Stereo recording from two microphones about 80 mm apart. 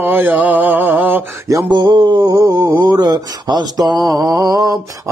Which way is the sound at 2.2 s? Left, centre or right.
Right.